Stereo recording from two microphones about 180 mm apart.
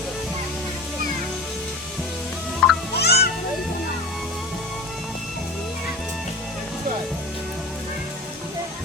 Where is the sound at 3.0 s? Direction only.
65° left (ahead or behind).